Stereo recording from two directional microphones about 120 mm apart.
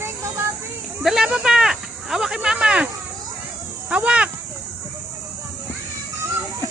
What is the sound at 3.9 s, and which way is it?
Speech, 10° right (ahead or behind).